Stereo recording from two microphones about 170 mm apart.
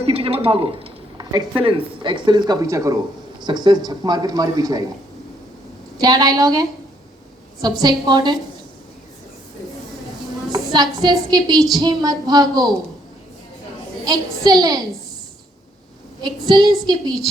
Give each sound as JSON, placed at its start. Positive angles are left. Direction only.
{"t": 0.0, "sound": "speech", "side_deg": -35}
{"t": 6.0, "sound": "speech", "side_deg": -20}
{"t": 10.5, "sound": "a woman's voice", "side_deg": -25}
{"t": 14.0, "sound": "speech", "side_deg": -25}
{"t": 16.5, "sound": "speech", "side_deg": -25}